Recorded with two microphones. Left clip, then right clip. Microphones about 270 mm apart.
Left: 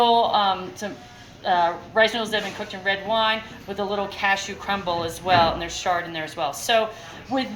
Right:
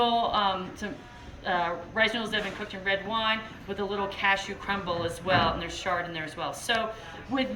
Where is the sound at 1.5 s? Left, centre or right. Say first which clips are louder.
Left 7 dB; centre.